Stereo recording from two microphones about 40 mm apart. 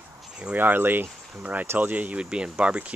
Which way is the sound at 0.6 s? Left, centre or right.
Right.